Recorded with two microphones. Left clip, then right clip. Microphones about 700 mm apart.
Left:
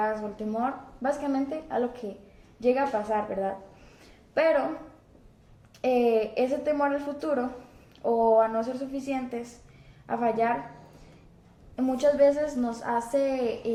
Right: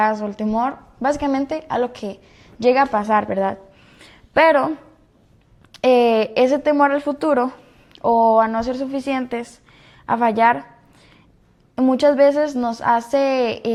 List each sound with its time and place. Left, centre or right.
0.0 s a woman's voice: right
2.6 s a woman's voice: right
5.7 s a woman's voice: right
11.8 s a woman's voice: right